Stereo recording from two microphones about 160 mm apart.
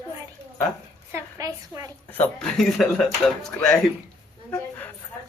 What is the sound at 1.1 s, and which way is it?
Speech, 20° right (ahead or behind).